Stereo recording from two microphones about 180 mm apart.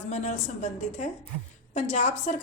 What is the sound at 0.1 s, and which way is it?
Speech, 40° left (ahead or behind).